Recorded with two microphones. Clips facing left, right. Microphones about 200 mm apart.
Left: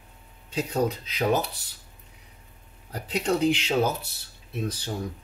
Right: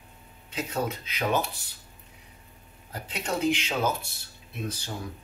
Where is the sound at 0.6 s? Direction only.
35° left (ahead or behind).